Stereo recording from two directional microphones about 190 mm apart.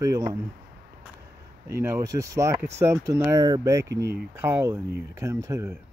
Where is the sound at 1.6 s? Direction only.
15° right (ahead or behind).